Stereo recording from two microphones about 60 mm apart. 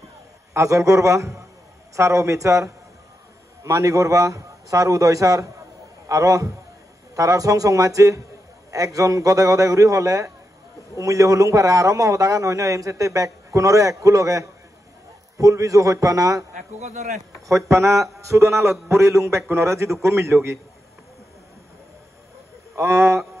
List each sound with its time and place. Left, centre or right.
0.5 s a man's voice: right
17.5 s a man's voice: right
22.8 s a man's voice: right